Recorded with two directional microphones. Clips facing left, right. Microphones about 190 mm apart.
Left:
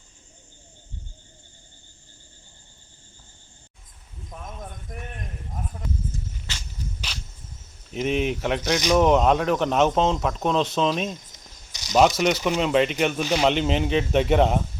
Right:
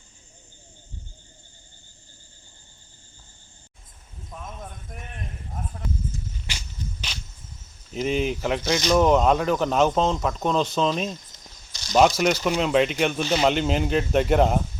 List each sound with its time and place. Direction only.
4.4 s speech: 5° right (ahead or behind)
7.9 s speech: centre (ahead or behind)
11.7 s cricket: 15° left (ahead or behind)
11.9 s speech: centre (ahead or behind)